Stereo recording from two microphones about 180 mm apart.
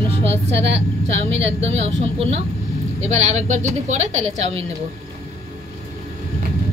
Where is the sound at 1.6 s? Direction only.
35° right (ahead or behind).